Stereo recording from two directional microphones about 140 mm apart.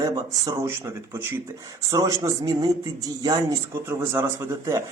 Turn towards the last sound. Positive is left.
turn(degrees=-20)  # may be behind; listen again after turning